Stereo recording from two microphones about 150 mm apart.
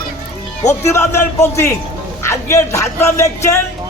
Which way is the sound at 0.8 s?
20° left (ahead or behind).